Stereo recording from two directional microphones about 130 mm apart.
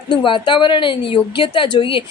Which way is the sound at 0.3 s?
40° left (ahead or behind).